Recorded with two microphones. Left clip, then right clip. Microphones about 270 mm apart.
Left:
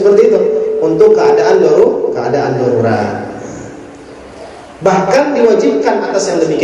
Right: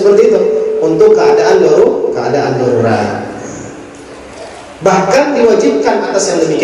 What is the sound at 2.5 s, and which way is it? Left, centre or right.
Speech, centre.